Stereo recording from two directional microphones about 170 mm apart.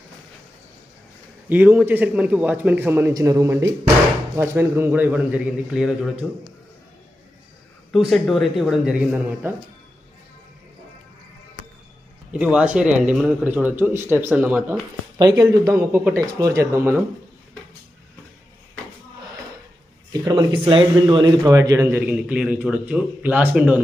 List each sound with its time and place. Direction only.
1.5 s a man's voice: 10° right (ahead or behind)
7.9 s speech: centre (ahead or behind)
12.3 s a man's voice: 5° right (ahead or behind)
20.1 s a man's voice: 25° right (ahead or behind)
22.0 s a man's voice: 5° right (ahead or behind)